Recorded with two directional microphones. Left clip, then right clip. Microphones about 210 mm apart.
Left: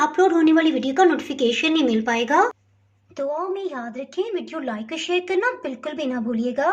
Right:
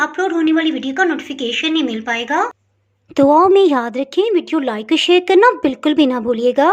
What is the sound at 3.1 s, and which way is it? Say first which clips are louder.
Speech: right 15 dB; 50° right (ahead or behind).